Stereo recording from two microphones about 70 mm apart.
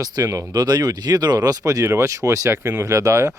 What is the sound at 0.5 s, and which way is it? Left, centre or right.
Speech, right.